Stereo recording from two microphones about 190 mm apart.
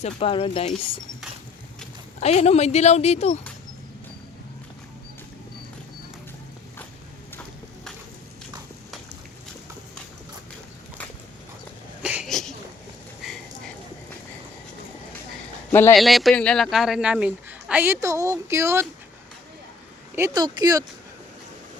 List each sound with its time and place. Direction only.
0.0 s speech: 30° left (ahead or behind)
2.2 s speech: 35° left (ahead or behind)
12.0 s a sound: 5° right (ahead or behind)
15.7 s speech: 10° left (ahead or behind)
16.0 s speech: centre (ahead or behind)
20.1 s speech: 15° right (ahead or behind)